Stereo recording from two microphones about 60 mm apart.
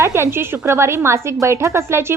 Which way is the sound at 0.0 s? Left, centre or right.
Right.